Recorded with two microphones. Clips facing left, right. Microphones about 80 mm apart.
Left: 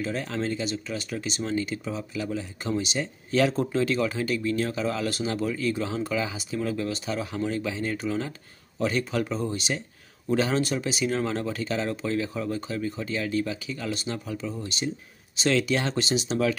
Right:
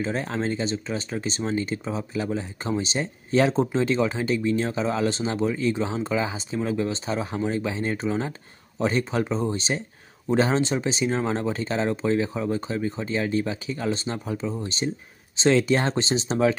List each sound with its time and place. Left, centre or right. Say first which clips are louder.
0.0 s speech: right 3 dB; right